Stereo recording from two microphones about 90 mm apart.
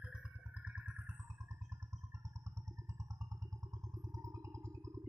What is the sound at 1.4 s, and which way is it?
Music, 35° right (ahead or behind).